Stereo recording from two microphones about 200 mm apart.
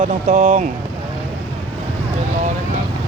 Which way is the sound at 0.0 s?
40° right (ahead or behind).